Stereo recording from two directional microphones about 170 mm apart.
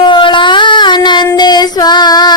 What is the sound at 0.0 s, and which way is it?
Child singing, 30° left (ahead or behind).